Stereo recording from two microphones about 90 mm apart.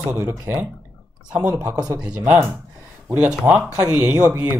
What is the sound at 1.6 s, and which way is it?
Speech, 45° right (ahead or behind).